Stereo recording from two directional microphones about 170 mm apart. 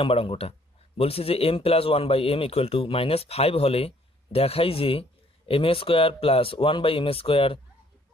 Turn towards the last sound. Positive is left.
turn(degrees=35)  # may be behind; listen again after turning